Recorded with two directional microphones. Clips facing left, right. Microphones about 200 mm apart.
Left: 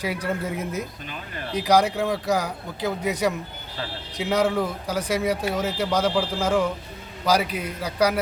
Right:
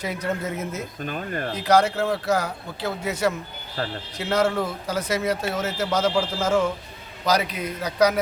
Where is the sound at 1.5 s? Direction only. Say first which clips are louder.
Even; 10° left (ahead or behind).